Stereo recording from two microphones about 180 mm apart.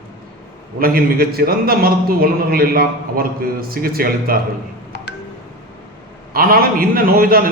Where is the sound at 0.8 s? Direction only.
55° right (ahead or behind).